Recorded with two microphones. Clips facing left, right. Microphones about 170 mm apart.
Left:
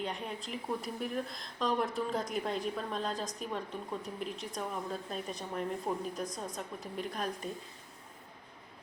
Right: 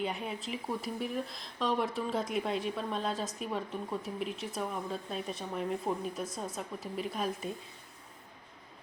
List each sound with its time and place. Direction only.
0.0 s speech: 5° right (ahead or behind)